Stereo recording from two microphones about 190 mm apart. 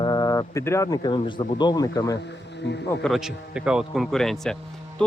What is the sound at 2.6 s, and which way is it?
Speech, 65° left (ahead or behind).